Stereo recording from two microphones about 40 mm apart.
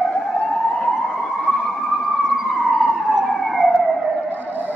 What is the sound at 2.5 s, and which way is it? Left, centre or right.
Emergency vehicle, centre.